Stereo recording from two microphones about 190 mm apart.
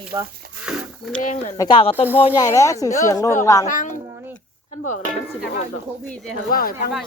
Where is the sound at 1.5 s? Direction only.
25° left (ahead or behind).